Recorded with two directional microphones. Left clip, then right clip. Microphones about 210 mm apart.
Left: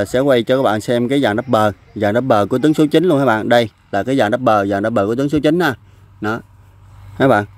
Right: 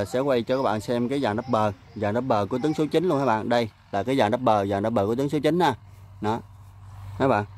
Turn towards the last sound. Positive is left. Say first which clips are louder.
# left 9 dB
turn(degrees=25)  # may be behind; listen again after turning